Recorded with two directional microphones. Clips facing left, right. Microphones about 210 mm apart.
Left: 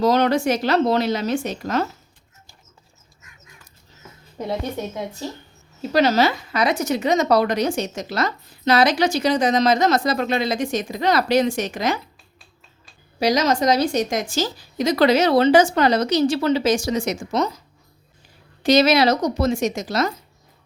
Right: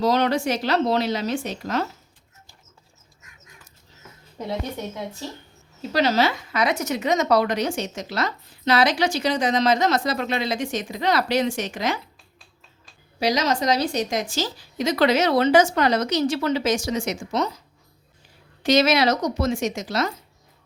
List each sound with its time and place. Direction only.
0.0 s a woman's voice: 50° left (ahead or behind)
5.9 s a woman's voice: 45° left (ahead or behind)
13.1 s a woman's voice: 45° left (ahead or behind)
18.6 s a woman's voice: 35° left (ahead or behind)